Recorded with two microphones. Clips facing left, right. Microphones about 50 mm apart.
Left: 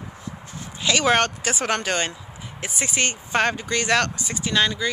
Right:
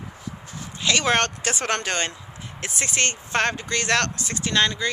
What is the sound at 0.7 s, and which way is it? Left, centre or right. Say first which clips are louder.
Speech: left 2 dB; centre.